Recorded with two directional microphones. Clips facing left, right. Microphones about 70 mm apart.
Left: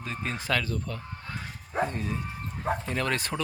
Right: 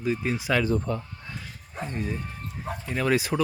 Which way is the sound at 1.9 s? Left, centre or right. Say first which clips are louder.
Right 1 dB; centre.